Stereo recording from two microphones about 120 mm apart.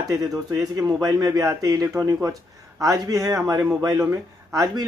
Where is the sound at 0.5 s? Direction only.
30° right (ahead or behind).